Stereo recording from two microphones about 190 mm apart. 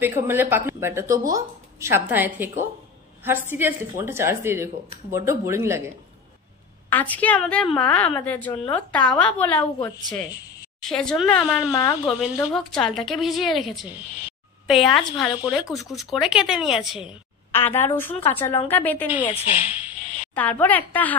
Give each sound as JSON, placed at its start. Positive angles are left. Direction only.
{"t": 0.0, "sound": "a woman's voice", "side_deg": -10}
{"t": 6.9, "sound": "a woman's voice", "side_deg": 10}
{"t": 11.7, "sound": "speech", "side_deg": 20}
{"t": 12.1, "sound": "a woman's voice", "side_deg": -5}
{"t": 17.6, "sound": "a woman's voice", "side_deg": 10}
{"t": 19.3, "sound": "speech", "side_deg": 35}
{"t": 20.0, "sound": "a sound", "side_deg": 40}
{"t": 20.3, "sound": "a woman's voice", "side_deg": 10}